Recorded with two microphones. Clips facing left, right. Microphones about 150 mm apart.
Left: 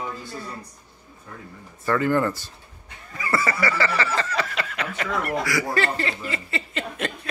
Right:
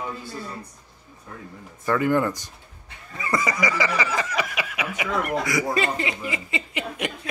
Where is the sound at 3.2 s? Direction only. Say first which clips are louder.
Even; 15° right (ahead or behind).